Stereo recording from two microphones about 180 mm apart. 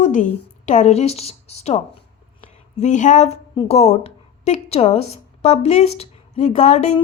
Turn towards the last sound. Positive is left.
turn(degrees=40)  # may be behind; listen again after turning